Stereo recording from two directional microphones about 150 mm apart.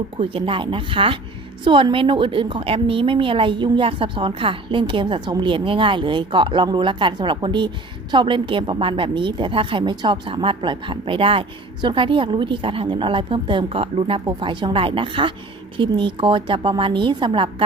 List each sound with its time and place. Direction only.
0.2 s a woman's voice: 35° right (ahead or behind)